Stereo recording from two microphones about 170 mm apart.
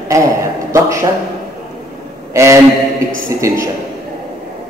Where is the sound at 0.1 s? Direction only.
20° right (ahead or behind).